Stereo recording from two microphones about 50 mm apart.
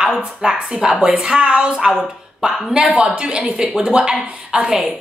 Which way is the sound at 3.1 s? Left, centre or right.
Right.